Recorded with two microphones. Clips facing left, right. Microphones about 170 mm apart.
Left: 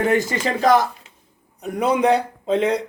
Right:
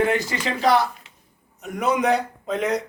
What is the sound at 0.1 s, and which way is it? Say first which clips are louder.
Speech: left 4 dB; 45° left (ahead or behind).